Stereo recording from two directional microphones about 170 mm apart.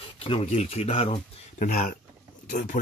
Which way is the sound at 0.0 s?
30° left (ahead or behind).